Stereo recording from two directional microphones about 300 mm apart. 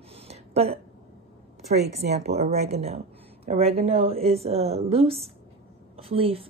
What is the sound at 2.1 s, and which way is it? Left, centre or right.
A woman's voice, right.